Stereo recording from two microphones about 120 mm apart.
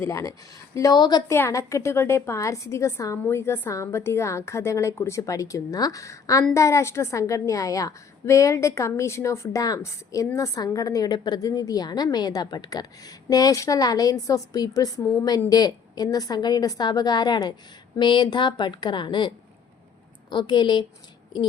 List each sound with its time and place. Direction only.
0.0 s a woman's voice: 25° left (ahead or behind)
1.3 s a woman's voice: 25° left (ahead or behind); by 19.3 s 40° left (ahead or behind)
20.3 s a woman's voice: 40° left (ahead or behind)